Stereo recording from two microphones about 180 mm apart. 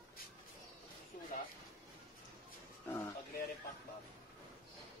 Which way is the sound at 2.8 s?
10° left (ahead or behind).